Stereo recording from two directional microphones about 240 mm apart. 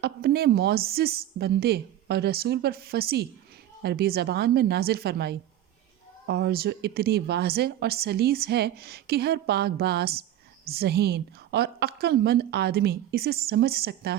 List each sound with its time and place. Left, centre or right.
0.0 s speech: right